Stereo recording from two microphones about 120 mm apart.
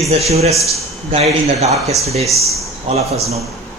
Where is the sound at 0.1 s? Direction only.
60° right (ahead or behind).